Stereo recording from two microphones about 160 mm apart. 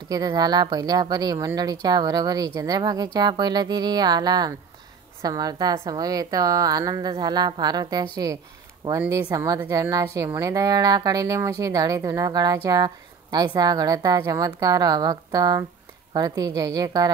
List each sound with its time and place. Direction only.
0.1 s speech: 25° right (ahead or behind)